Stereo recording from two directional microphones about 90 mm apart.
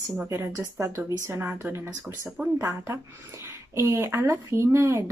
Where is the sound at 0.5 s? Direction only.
35° right (ahead or behind).